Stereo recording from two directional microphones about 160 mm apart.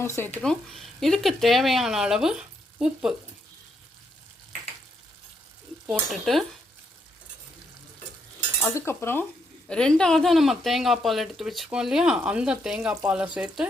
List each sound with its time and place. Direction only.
0.0 s speech: 15° left (ahead or behind)
0.4 s speech: centre (ahead or behind)
5.8 s speech: centre (ahead or behind)
8.6 s cutlery: 15° left (ahead or behind)
9.6 s speech: 5° left (ahead or behind)